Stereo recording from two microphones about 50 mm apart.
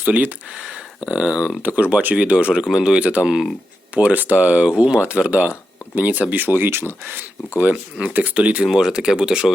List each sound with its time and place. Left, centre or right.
0.0 s speech: right
0.5 s speech: centre
1.6 s speech: right; by 3.5 s centre
3.9 s speech: right
8.0 s speech: right
8.6 s speech: centre